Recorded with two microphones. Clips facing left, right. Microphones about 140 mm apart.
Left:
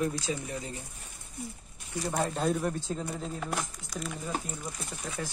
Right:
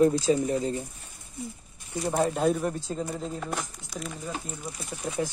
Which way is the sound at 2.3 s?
5° right (ahead or behind).